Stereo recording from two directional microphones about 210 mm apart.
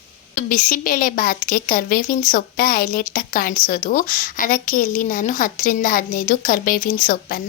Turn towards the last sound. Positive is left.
turn(degrees=40)  # may be behind; listen again after turning